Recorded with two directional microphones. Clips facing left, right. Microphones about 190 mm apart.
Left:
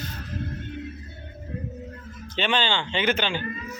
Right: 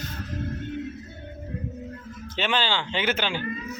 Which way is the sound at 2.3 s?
5° right (ahead or behind).